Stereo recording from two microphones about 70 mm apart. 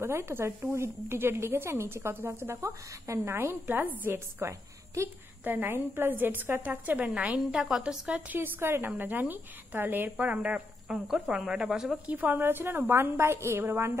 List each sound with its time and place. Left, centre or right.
0.0 s a woman's voice: right
4.0 s a woman's voice: right
5.4 s a woman's voice: right
7.3 s speech: centre
8.1 s a woman's voice: right
8.5 s a woman's voice: right; by 10.6 s centre
10.9 s speech: centre
12.1 s a woman's voice: right